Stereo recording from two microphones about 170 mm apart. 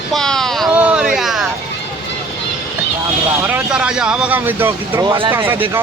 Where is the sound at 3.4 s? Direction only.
10° right (ahead or behind).